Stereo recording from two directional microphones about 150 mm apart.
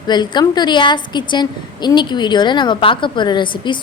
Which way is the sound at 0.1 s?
30° left (ahead or behind).